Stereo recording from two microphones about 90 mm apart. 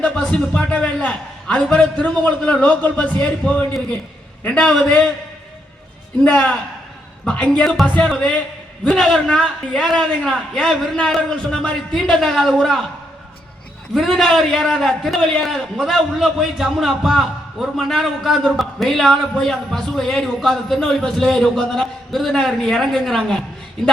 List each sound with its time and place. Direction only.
0.0 s a man's voice: 10° left (ahead or behind)
4.9 s a man's voice: 15° left (ahead or behind)
6.2 s a man's voice: 15° left (ahead or behind)
13.9 s a man's voice: centre (ahead or behind)